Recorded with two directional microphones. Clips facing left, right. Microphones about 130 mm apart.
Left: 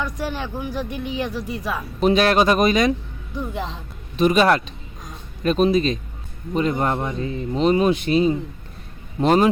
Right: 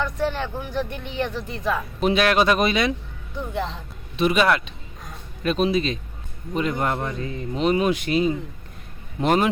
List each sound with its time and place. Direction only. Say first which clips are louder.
0.0 s speech: right 2 dB; 10° left (ahead or behind)
2.0 s speech: left 3 dB; 35° left (ahead or behind)
3.3 s speech: even; 15° left (ahead or behind)
4.2 s speech: left 3 dB; 40° left (ahead or behind)
6.9 s speech: left 3 dB; 20° left (ahead or behind)